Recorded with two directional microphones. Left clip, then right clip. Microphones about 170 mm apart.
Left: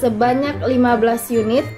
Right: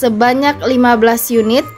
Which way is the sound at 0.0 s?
50° right (ahead or behind).